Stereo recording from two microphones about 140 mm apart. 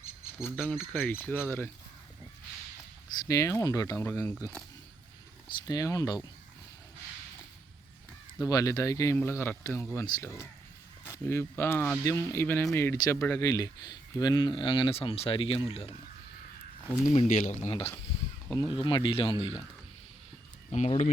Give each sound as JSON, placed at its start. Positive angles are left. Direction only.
{"t": 0.4, "sound": "speech", "side_deg": 10}
{"t": 3.2, "sound": "speech", "side_deg": 20}
{"t": 5.5, "sound": "speech", "side_deg": 25}
{"t": 8.4, "sound": "speech", "side_deg": 25}
{"t": 17.1, "sound": "speech", "side_deg": 55}
{"t": 17.7, "sound": "speech", "side_deg": 40}
{"t": 18.5, "sound": "speech", "side_deg": 30}
{"t": 20.7, "sound": "speech", "side_deg": 50}